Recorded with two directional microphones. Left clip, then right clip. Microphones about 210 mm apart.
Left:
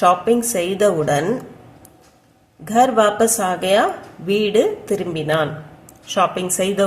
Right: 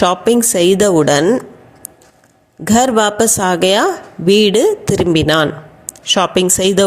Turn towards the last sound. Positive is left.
turn(degrees=-40)  # may be behind; listen again after turning